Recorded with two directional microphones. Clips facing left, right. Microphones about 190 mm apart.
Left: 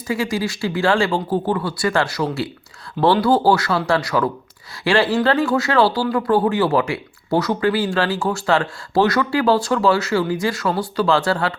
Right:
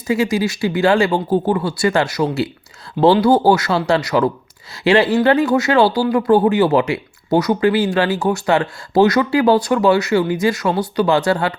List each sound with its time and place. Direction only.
0.1 s speech: 20° right (ahead or behind)